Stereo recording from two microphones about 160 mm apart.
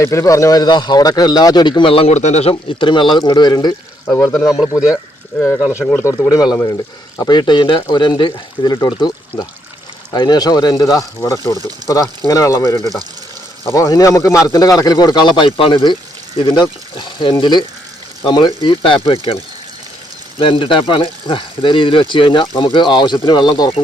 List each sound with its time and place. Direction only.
0.0 s a man's voice: 20° left (ahead or behind)
4.0 s speech: 15° left (ahead or behind)
5.8 s a man's voice: 15° left (ahead or behind)
11.8 s speech: 25° right (ahead or behind)
12.3 s a man's voice: 20° left (ahead or behind)
20.4 s speech: 30° left (ahead or behind)